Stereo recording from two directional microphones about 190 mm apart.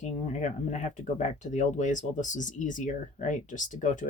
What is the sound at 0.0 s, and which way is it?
Speech, 40° left (ahead or behind).